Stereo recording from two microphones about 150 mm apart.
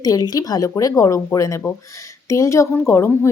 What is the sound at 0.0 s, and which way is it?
A woman's voice, 25° left (ahead or behind).